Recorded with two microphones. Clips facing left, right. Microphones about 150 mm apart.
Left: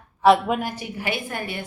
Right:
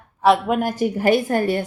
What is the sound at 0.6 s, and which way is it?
A woman's voice, 45° right (ahead or behind).